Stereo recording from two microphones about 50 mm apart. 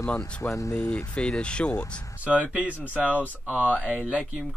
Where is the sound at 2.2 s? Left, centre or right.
Right.